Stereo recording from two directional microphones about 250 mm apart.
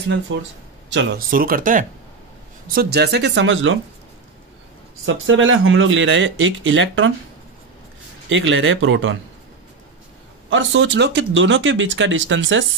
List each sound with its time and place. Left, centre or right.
0.3 s speech: right
5.0 s speech: right
8.3 s speech: right
10.5 s speech: right